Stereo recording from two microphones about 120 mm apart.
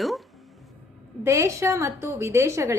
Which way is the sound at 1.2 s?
25° right (ahead or behind).